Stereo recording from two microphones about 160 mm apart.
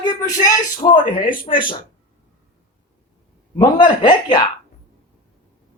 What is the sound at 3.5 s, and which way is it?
Speech, 25° left (ahead or behind).